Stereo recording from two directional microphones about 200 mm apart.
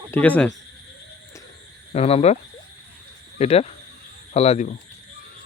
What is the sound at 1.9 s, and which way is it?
Speech, 30° left (ahead or behind).